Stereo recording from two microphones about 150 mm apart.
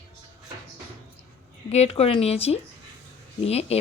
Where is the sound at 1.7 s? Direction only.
45° left (ahead or behind).